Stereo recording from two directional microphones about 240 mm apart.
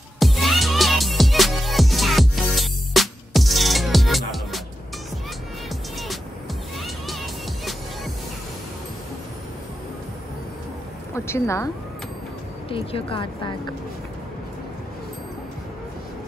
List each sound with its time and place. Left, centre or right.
0.2 s music: centre
6.8 s music: centre
11.1 s a woman's voice: centre
12.6 s speech: left